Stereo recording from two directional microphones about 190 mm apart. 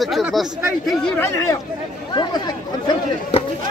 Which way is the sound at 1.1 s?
15° left (ahead or behind).